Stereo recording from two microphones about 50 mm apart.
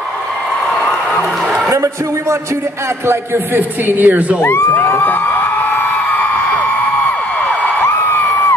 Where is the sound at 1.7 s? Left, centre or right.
Right.